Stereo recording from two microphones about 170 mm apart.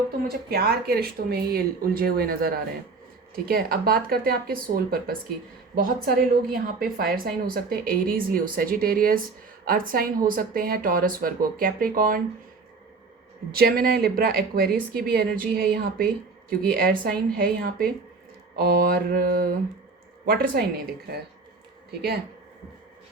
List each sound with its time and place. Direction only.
0.3 s a woman's voice: 65° right (ahead or behind)
13.5 s a woman's voice: 65° right (ahead or behind)